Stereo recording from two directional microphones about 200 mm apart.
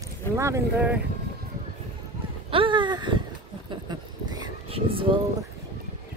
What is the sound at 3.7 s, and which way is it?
Vehicle, 20° right (ahead or behind).